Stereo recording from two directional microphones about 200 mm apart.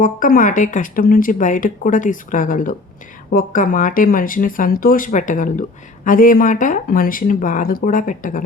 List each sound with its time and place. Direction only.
0.0 s speech: 45° left (ahead or behind)